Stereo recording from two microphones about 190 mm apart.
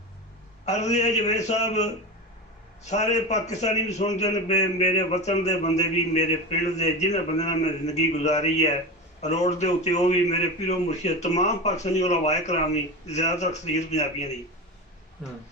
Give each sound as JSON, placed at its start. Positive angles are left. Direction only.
{"t": 0.6, "sound": "a man's voice", "side_deg": 35}
{"t": 15.2, "sound": "speech", "side_deg": 0}